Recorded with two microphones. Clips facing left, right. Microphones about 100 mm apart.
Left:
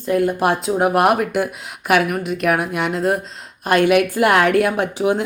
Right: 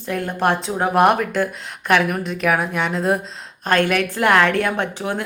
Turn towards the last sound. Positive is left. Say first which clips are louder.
# left 5 dB
turn(degrees=15)  # may be behind; listen again after turning